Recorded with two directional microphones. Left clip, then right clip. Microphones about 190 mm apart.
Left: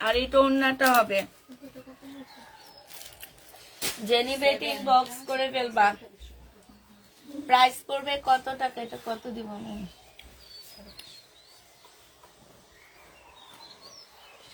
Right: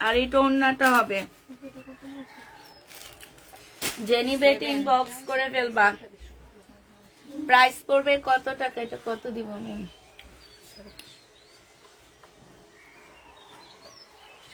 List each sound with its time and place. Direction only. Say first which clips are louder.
0.0 s speech: even; 20° right (ahead or behind)
4.1 s a woman's voice: right 3 dB; 30° right (ahead or behind)
7.4 s a woman's voice: right 2 dB; 35° right (ahead or behind)